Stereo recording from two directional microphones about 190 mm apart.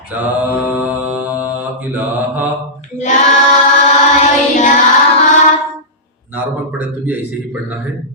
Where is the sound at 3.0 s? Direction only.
40° left (ahead or behind).